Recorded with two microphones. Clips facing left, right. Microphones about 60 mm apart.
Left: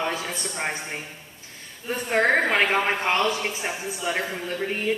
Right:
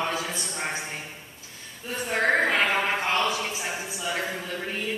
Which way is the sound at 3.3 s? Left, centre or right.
Left.